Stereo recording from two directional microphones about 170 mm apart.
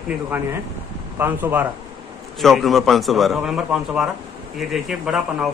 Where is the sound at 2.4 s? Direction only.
Centre (ahead or behind).